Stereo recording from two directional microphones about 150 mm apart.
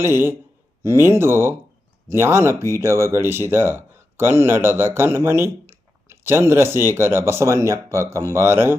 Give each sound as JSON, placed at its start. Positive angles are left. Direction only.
{"t": 0.0, "sound": "speech", "side_deg": -15}